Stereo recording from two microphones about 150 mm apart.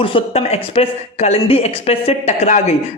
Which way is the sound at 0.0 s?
40° left (ahead or behind).